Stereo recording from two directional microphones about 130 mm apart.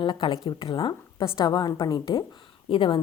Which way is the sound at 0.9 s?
30° left (ahead or behind).